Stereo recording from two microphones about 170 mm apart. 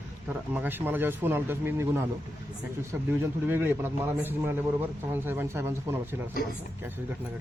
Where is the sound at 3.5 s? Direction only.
10° right (ahead or behind).